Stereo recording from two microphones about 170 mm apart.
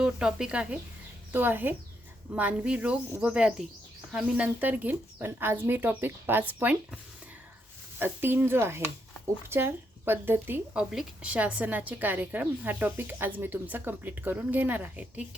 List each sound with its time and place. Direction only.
0.0 s a woman's voice: 5° right (ahead or behind)